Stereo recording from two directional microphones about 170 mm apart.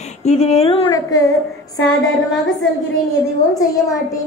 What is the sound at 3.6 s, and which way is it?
Speech, 20° left (ahead or behind).